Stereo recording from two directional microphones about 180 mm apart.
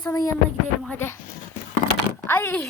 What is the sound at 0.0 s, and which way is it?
Child singing, 20° left (ahead or behind).